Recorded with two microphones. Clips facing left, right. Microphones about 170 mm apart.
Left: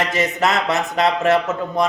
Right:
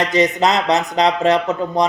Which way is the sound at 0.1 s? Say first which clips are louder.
Right 4 dB; 20° right (ahead or behind).